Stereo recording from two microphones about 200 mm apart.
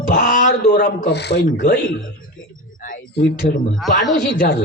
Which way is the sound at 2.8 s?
40° left (ahead or behind).